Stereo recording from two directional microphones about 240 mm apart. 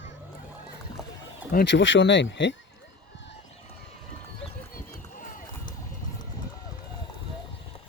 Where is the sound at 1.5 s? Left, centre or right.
Left.